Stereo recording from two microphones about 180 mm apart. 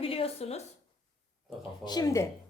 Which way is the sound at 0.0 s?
30° left (ahead or behind).